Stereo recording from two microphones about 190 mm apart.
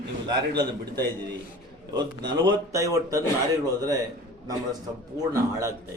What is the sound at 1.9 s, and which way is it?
Speech, 20° right (ahead or behind).